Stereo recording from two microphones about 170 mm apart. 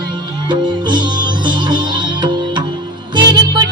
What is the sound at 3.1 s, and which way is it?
Music, 25° right (ahead or behind).